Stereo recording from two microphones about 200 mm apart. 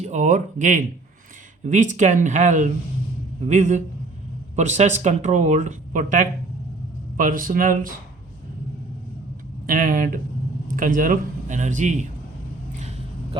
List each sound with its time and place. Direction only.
0.0 s speech: 35° right (ahead or behind)
9.6 s speech: 40° right (ahead or behind)